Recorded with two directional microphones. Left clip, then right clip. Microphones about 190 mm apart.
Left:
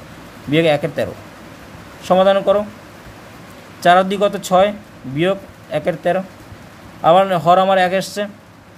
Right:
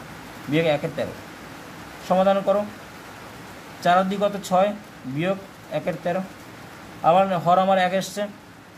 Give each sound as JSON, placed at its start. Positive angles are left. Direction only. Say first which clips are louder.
{"t": 0.5, "sound": "speech", "louder": "left 7 dB", "side_deg": 35}
{"t": 2.0, "sound": "speech", "louder": "left 7 dB", "side_deg": 40}
{"t": 3.8, "sound": "speech", "louder": "left 7 dB", "side_deg": 40}